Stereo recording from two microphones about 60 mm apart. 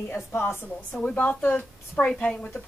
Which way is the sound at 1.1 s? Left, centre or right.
Left.